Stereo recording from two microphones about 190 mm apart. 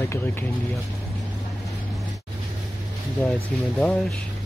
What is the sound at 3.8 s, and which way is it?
Speech, 5° left (ahead or behind).